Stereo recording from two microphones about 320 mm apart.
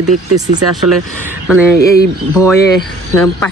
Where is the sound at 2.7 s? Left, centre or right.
Centre.